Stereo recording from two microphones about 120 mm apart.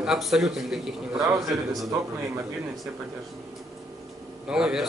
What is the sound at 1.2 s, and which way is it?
Speech, 30° right (ahead or behind).